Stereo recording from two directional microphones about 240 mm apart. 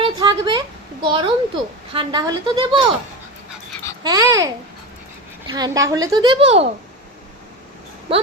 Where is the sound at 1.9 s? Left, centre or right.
Centre.